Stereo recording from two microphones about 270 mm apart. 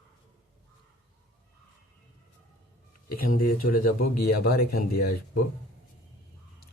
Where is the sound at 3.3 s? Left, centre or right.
Left.